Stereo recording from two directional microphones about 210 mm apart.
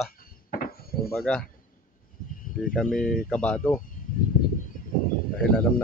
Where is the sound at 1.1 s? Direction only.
5° left (ahead or behind).